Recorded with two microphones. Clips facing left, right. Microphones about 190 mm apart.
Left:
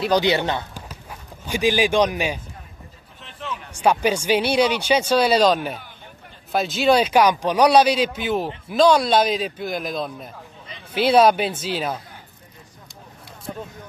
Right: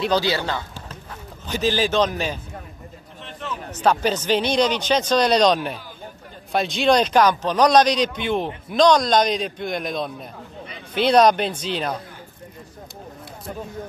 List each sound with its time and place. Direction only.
0.1 s speech: 20° left (ahead or behind)
3.7 s a man's voice: 10° left (ahead or behind)